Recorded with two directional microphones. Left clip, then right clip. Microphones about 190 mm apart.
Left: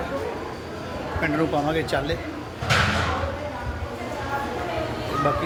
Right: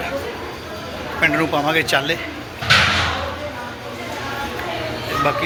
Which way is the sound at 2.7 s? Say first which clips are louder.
Right 7 dB; 70° left (ahead or behind).